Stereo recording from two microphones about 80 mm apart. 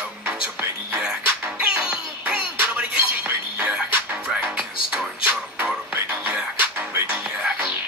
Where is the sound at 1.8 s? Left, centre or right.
Centre.